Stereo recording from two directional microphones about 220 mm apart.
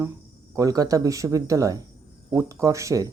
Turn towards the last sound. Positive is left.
turn(degrees=-15)  # may be behind; listen again after turning